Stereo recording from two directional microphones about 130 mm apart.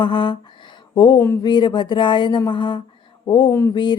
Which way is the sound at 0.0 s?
40° left (ahead or behind).